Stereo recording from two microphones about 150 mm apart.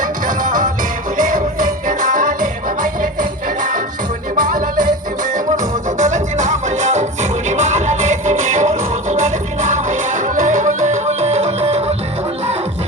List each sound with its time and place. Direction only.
0.0 s music: 60° right (ahead or behind); by 11.9 s 40° right (ahead or behind)